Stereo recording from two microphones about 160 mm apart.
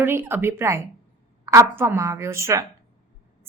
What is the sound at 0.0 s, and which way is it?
A woman's voice, 15° right (ahead or behind).